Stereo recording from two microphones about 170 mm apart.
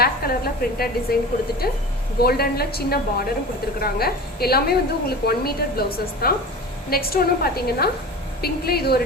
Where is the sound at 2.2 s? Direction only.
65° left (ahead or behind).